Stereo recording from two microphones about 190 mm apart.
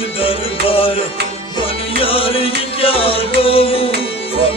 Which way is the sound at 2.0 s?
30° left (ahead or behind).